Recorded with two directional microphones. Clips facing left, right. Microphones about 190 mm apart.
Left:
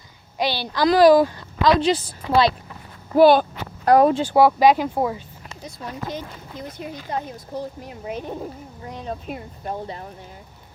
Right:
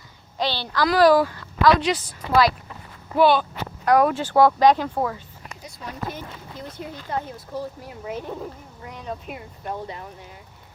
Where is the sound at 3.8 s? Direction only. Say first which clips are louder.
Left 3 dB; 30° left (ahead or behind).